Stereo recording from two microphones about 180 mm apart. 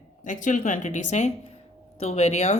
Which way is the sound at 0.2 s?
45° left (ahead or behind).